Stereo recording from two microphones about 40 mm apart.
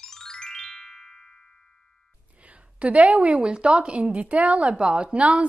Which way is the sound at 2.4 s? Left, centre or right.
Right.